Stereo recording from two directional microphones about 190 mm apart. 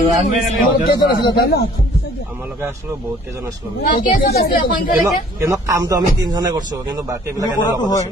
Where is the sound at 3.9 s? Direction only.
50° left (ahead or behind).